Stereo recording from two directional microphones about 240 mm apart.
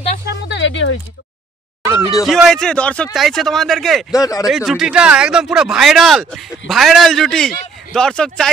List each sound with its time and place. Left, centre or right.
0.3 s a sound: left
2.2 s speech: centre
4.1 s speech: centre
4.5 s speech: centre